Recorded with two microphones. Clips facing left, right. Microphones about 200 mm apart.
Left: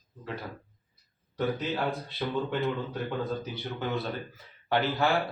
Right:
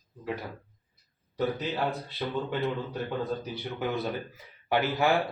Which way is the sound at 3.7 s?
15° right (ahead or behind).